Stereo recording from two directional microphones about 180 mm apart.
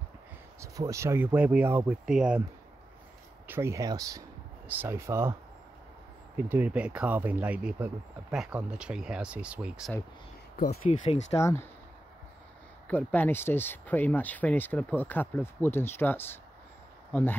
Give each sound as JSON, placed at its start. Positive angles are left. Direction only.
{"t": 0.6, "sound": "speech", "side_deg": -15}
{"t": 3.4, "sound": "speech", "side_deg": -15}
{"t": 6.3, "sound": "speech", "side_deg": -10}
{"t": 10.9, "sound": "speech", "side_deg": 35}
{"t": 11.3, "sound": "speech", "side_deg": 15}
{"t": 12.8, "sound": "speech", "side_deg": 10}